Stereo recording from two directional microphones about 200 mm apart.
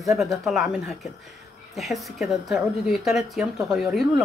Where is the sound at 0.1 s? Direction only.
Centre (ahead or behind).